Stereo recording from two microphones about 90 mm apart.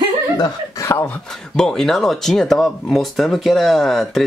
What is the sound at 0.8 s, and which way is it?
Speech, 25° left (ahead or behind).